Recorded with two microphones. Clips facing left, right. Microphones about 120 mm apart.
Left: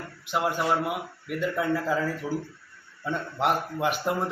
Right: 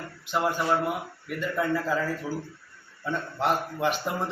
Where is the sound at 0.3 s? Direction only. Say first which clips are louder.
Even; 5° left (ahead or behind).